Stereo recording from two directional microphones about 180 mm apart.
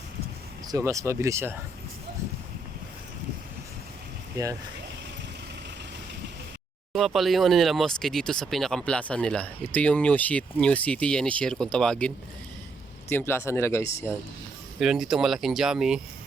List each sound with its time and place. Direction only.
0.7 s speech: 15° right (ahead or behind)
6.9 s speech: centre (ahead or behind)
14.8 s speech: centre (ahead or behind)